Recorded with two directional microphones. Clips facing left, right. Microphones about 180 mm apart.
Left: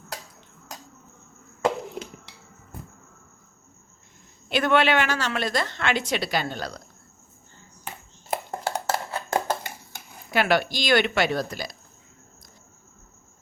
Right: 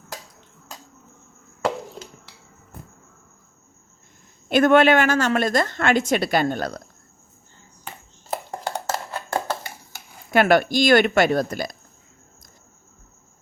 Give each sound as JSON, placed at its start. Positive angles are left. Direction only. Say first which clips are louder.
{"t": 4.4, "sound": "a woman's voice", "louder": "right 6 dB", "side_deg": -45}
{"t": 9.3, "sound": "a sound", "louder": "even", "side_deg": 15}
{"t": 10.3, "sound": "a woman's voice", "louder": "right 6 dB", "side_deg": -50}